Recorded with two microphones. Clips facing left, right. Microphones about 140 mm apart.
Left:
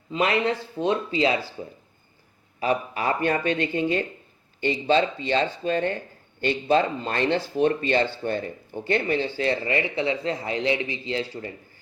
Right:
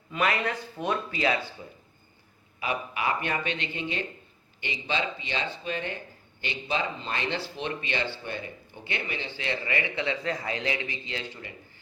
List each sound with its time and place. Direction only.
0.1 s speech: 25° left (ahead or behind)
2.6 s speech: 40° left (ahead or behind)